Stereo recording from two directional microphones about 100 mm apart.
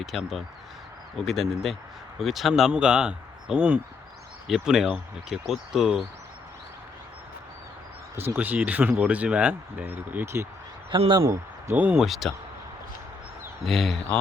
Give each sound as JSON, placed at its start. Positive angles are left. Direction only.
{"t": 0.0, "sound": "speech", "side_deg": 0}
{"t": 8.4, "sound": "speech", "side_deg": -15}
{"t": 11.8, "sound": "speech", "side_deg": -15}
{"t": 12.0, "sound": "speech", "side_deg": 0}
{"t": 13.7, "sound": "speech", "side_deg": 0}